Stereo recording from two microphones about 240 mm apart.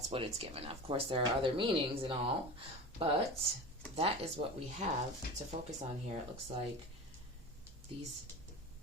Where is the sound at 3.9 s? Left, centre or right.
Right.